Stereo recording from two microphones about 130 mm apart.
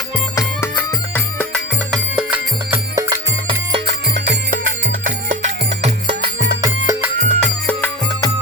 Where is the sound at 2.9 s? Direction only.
25° right (ahead or behind).